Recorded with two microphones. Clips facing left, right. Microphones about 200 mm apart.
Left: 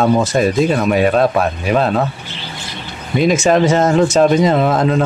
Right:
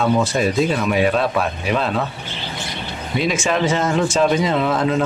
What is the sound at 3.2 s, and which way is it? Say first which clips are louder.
Speech: left 7 dB; 40° left (ahead or behind).